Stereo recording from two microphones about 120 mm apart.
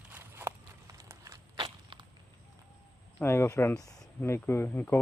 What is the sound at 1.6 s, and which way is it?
Walk, 45° right (ahead or behind).